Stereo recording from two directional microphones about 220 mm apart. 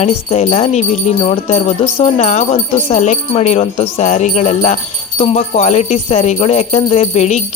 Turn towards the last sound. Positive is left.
turn(degrees=30)  # may be behind; listen again after turning